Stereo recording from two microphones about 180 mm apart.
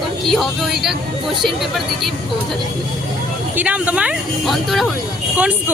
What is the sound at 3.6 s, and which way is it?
Speech, 10° right (ahead or behind).